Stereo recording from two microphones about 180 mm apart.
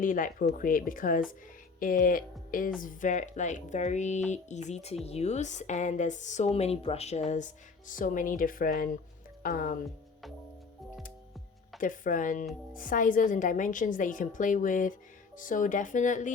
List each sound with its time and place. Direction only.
0.0 s a woman's voice: 50° left (ahead or behind)
11.8 s a woman's voice: 50° left (ahead or behind)